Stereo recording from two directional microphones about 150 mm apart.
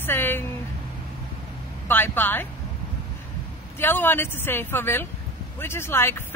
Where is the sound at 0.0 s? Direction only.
15° left (ahead or behind).